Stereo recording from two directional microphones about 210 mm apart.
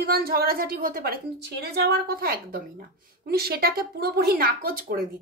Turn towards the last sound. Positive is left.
turn(degrees=-45)  # may be behind; listen again after turning